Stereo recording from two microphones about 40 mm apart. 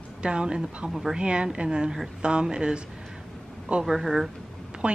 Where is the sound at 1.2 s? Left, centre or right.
Right.